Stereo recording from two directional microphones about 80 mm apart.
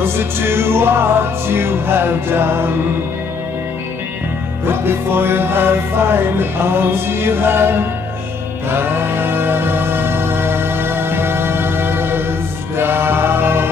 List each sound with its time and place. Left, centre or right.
0.0 s music: right
4.8 s music: right